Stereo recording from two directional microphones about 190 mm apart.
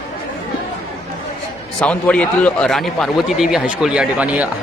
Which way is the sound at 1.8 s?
5° left (ahead or behind).